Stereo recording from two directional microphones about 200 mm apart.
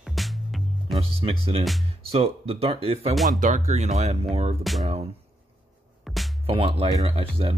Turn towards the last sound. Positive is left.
turn(degrees=-30)  # may be behind; listen again after turning